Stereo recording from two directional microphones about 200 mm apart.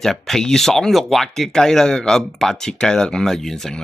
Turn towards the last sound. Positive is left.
turn(degrees=0)  # may be behind; listen again after turning